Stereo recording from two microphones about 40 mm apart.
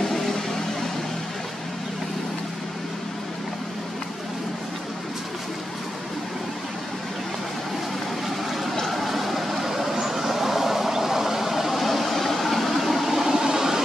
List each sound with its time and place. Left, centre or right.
8.7 s vehicle: centre